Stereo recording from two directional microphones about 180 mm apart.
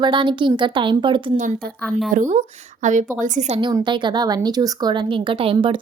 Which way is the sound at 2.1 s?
45° right (ahead or behind).